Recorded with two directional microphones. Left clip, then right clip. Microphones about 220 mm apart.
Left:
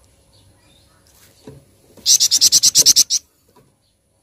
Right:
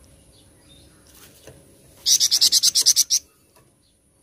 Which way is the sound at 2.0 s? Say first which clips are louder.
Left 4 dB; 30° left (ahead or behind).